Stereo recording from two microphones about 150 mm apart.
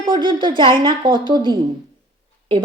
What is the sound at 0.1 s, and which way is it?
A woman's voice, 30° right (ahead or behind).